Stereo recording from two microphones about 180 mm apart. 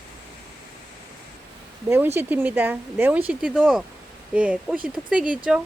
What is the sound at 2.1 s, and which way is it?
Speech, 10° right (ahead or behind).